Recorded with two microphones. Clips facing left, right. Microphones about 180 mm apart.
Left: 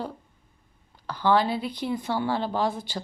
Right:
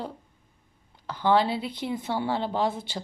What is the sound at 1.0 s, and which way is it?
Speech, 20° right (ahead or behind).